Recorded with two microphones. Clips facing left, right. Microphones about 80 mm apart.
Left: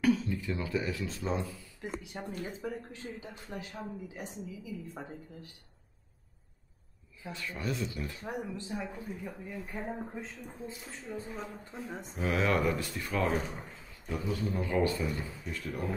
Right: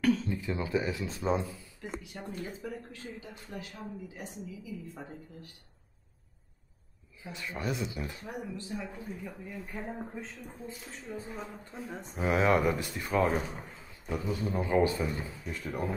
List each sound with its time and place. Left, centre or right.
0.0 s a sound: centre
0.3 s a man's voice: right
1.8 s speech: centre
7.2 s a man's voice: centre
8.3 s speech: left
8.9 s speech: centre
12.2 s a man's voice: right
13.2 s a man's voice: centre